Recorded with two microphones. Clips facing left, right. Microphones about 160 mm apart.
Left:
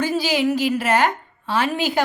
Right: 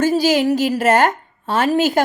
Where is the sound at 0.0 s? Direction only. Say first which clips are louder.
Right 5 dB; 45° right (ahead or behind).